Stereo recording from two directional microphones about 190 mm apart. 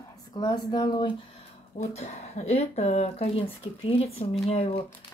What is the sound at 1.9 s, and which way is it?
Speech, 35° left (ahead or behind).